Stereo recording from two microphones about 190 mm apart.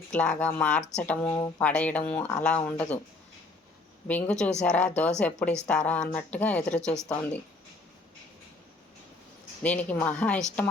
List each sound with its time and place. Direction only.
0.1 s a woman's voice: 5° left (ahead or behind)
1.3 s speech: 15° left (ahead or behind)
1.6 s speech: 5° left (ahead or behind)
4.1 s a woman's voice: 5° left (ahead or behind)
9.6 s speech: 10° left (ahead or behind)